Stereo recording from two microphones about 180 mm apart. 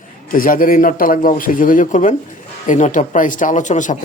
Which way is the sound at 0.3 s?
50° left (ahead or behind).